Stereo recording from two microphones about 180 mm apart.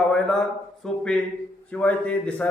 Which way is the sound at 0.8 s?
5° left (ahead or behind).